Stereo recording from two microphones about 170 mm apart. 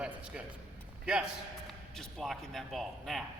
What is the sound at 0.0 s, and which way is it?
A man's voice, 5° right (ahead or behind).